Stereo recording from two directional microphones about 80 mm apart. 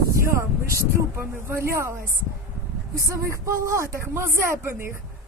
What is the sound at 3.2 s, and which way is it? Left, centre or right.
Speech, right.